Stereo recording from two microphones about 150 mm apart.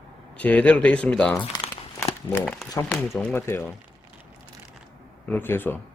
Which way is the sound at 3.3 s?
15° left (ahead or behind).